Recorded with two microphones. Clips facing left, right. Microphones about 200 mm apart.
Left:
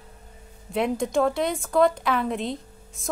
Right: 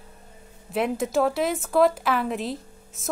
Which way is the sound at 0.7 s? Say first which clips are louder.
Even; 5° right (ahead or behind).